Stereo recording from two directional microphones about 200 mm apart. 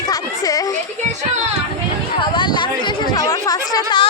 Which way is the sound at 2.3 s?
25° left (ahead or behind).